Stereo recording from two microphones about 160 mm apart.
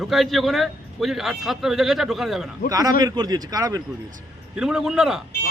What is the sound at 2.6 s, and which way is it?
Speech, 25° right (ahead or behind).